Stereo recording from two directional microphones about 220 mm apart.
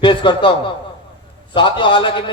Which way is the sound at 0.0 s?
20° left (ahead or behind).